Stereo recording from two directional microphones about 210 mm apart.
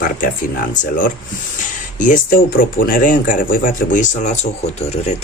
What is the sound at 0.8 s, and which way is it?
Speech, 40° left (ahead or behind).